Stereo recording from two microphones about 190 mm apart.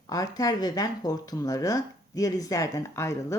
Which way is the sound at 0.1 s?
20° left (ahead or behind).